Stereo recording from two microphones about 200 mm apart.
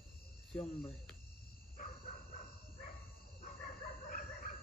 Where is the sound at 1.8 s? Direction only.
45° left (ahead or behind).